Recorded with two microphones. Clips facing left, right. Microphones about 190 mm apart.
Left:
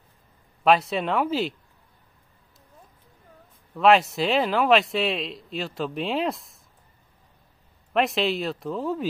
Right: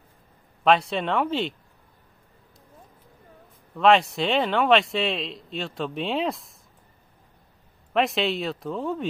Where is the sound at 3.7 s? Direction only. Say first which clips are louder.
Even; centre (ahead or behind).